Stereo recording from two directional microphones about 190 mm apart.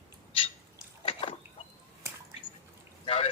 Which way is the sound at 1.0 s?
30° left (ahead or behind).